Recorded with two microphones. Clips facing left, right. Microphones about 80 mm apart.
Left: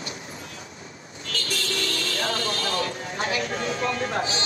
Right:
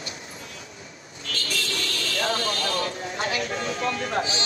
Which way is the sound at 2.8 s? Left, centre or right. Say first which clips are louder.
Even; left.